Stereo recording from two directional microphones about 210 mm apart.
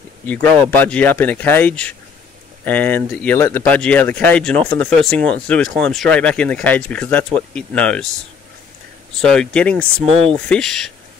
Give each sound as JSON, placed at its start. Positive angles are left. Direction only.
{"t": 0.3, "sound": "speech", "side_deg": 10}
{"t": 9.2, "sound": "speech", "side_deg": 5}
{"t": 10.0, "sound": "speech", "side_deg": -25}
{"t": 10.3, "sound": "speech", "side_deg": 5}